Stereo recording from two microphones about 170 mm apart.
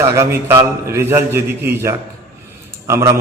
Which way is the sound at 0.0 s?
15° right (ahead or behind).